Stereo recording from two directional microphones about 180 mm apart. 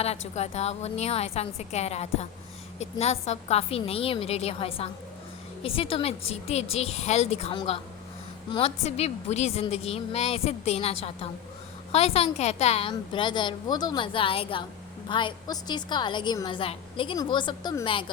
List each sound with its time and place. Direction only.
0.3 s a woman's voice: 35° left (ahead or behind)
12.9 s a woman's voice: 25° left (ahead or behind)